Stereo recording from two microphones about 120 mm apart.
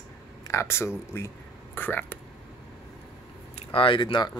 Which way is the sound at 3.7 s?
45° left (ahead or behind).